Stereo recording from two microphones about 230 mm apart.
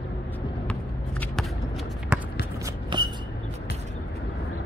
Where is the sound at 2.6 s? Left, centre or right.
Centre.